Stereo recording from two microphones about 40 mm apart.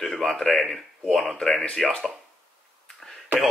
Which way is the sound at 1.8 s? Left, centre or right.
Centre.